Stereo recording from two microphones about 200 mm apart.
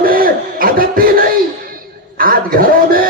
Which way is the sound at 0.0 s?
45° right (ahead or behind).